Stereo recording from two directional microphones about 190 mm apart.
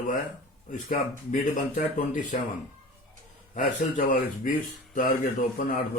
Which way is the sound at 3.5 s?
45° left (ahead or behind).